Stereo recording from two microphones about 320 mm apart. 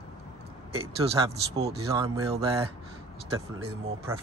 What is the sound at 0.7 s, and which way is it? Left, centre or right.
Speech, centre.